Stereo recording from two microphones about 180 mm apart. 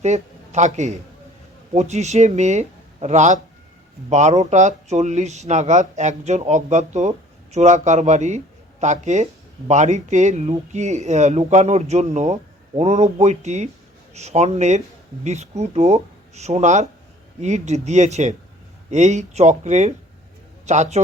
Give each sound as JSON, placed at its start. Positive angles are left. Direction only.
{"t": 0.0, "sound": "speech", "side_deg": -40}